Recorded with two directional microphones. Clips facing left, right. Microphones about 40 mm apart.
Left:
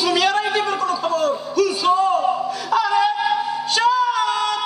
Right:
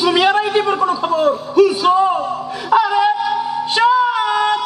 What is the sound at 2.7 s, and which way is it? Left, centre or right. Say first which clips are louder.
Music: right 5 dB; right.